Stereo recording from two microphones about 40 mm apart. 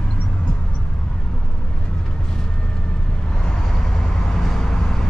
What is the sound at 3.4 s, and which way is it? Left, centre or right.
Vehicle, centre.